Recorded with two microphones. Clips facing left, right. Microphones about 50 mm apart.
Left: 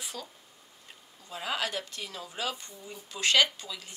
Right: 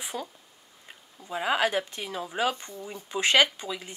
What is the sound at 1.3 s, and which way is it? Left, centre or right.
Speech, right.